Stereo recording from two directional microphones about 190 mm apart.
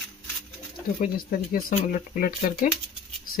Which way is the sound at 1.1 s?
50° left (ahead or behind).